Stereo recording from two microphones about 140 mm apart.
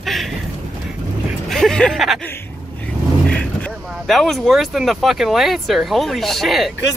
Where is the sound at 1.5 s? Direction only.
5° left (ahead or behind).